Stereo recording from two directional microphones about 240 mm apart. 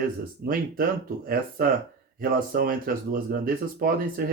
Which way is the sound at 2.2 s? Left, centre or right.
Right.